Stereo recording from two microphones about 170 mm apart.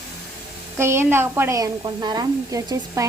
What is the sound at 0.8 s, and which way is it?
Speech, 15° right (ahead or behind).